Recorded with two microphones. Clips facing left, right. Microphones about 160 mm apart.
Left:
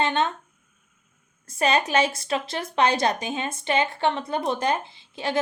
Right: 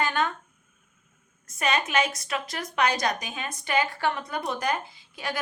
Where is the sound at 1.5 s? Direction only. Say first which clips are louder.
Left 5 dB; 30° left (ahead or behind).